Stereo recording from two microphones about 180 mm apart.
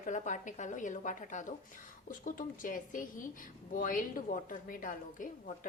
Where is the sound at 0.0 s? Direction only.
45° left (ahead or behind).